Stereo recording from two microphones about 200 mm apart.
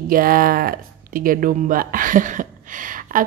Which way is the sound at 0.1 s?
45° right (ahead or behind).